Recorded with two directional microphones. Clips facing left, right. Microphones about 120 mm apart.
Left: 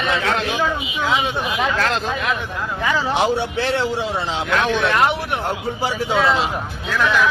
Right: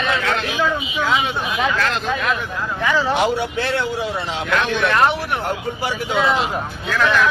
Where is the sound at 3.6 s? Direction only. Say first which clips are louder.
Left 1 dB; 30° left (ahead or behind).